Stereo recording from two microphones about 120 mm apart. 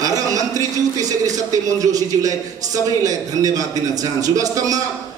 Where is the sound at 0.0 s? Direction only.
30° right (ahead or behind).